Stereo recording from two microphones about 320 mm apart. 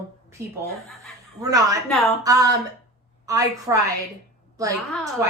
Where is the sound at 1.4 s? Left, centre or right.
Centre.